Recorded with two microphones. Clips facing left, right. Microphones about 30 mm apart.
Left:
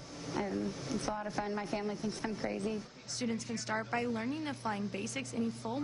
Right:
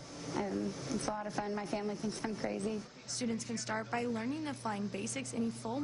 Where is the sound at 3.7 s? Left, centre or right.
Left.